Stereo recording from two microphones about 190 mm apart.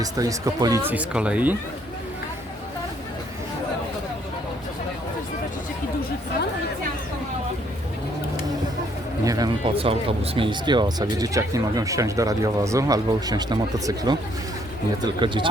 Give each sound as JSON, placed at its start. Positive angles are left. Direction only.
{"t": 0.0, "sound": "speech", "side_deg": -20}
{"t": 9.2, "sound": "speech", "side_deg": -20}